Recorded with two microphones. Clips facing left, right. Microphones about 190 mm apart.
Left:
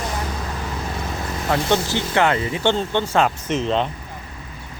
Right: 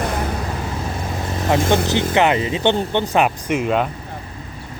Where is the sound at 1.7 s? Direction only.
15° right (ahead or behind).